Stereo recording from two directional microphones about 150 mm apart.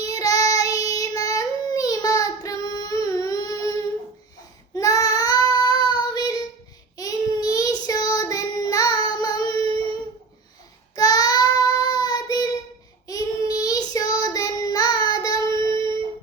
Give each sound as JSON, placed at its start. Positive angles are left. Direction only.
{"t": 0.1, "sound": "child singing", "side_deg": 25}
{"t": 10.9, "sound": "child singing", "side_deg": 25}